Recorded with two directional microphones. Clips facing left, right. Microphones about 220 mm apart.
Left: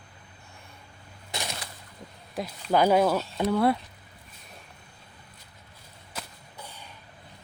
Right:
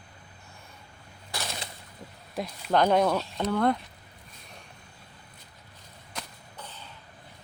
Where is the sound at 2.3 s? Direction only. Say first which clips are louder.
Left 1 dB; 5° left (ahead or behind).